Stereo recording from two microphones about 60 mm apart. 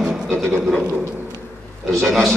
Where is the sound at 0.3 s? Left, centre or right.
Centre.